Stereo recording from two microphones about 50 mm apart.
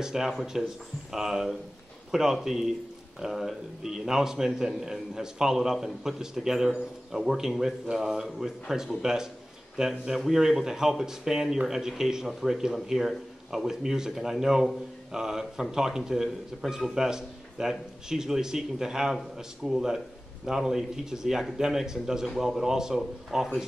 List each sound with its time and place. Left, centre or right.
0.0 s speech: centre